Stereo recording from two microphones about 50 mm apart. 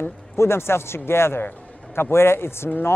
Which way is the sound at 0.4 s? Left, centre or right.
Left.